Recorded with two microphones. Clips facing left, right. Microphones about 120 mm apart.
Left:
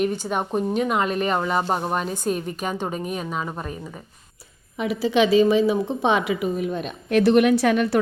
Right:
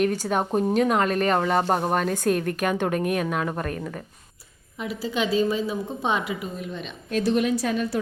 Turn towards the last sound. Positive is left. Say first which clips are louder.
# left 6 dB
turn(degrees=70)  # may be behind; listen again after turning